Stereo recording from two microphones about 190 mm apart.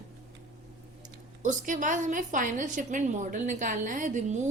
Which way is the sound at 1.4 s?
40° right (ahead or behind).